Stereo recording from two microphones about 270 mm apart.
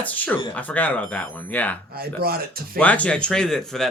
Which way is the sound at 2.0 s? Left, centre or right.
Right.